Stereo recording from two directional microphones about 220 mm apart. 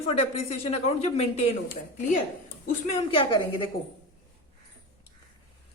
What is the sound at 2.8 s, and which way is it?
Speech, 25° left (ahead or behind).